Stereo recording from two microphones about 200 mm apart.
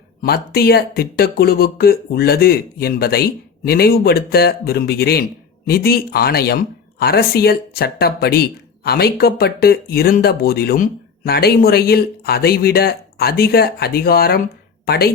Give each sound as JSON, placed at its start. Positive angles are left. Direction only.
{"t": 0.2, "sound": "speech", "side_deg": 50}